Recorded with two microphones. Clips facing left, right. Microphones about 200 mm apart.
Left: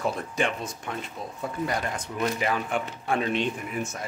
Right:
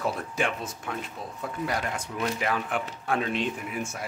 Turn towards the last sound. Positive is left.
turn(degrees=-5)  # may be behind; listen again after turning